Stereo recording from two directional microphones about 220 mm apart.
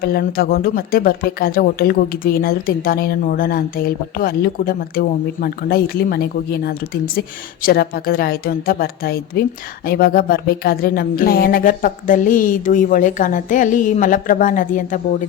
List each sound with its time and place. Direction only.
0.0 s speech: 45° left (ahead or behind)